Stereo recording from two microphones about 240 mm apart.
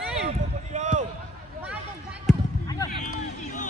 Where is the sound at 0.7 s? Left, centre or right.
Right.